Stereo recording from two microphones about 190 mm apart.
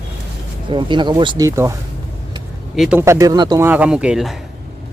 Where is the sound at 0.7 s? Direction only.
25° right (ahead or behind).